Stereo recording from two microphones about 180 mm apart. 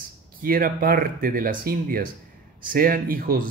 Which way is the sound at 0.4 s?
50° right (ahead or behind).